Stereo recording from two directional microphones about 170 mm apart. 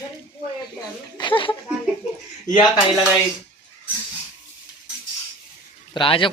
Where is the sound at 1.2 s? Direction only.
30° left (ahead or behind).